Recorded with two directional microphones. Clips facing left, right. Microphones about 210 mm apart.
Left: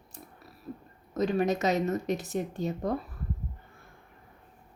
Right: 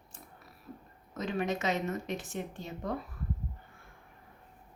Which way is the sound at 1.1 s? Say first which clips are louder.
Left 6 dB; 40° left (ahead or behind).